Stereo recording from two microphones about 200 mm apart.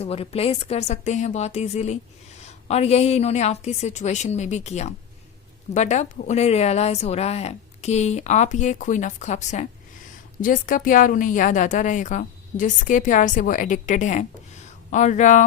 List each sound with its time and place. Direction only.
0.0 s a woman's voice: 30° left (ahead or behind)